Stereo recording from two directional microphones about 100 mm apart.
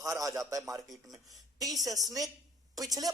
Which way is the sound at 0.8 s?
Centre (ahead or behind).